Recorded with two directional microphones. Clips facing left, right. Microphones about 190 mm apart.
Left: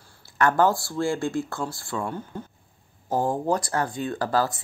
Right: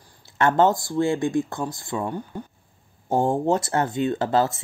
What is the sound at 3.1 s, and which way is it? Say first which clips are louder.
Speech: right 3 dB; 25° right (ahead or behind).